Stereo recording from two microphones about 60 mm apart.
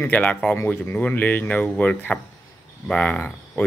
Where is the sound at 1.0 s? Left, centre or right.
Left.